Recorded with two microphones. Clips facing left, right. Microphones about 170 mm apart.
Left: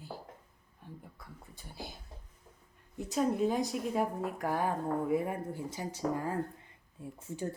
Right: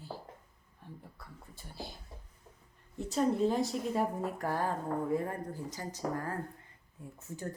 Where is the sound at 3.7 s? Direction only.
5° left (ahead or behind).